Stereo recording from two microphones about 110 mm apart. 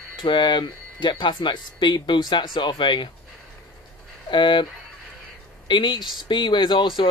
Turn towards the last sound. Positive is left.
turn(degrees=45)  # may be behind; listen again after turning